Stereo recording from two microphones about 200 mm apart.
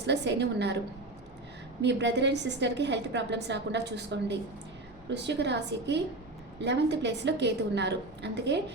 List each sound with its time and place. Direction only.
0.0 s a woman's voice: 60° right (ahead or behind)
1.8 s a woman's voice: 60° right (ahead or behind)